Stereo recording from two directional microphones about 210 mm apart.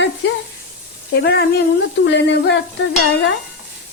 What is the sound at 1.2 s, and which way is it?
A woman's voice, 50° left (ahead or behind).